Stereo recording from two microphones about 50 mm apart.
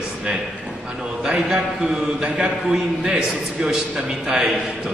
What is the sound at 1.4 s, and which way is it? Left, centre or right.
A man's voice, centre.